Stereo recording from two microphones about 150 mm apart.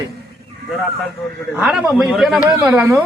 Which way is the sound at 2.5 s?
15° right (ahead or behind).